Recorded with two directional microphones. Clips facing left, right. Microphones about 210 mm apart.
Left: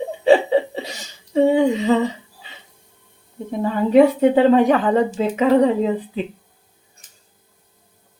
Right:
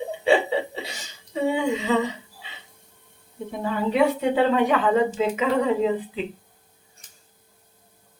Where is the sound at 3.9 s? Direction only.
40° left (ahead or behind).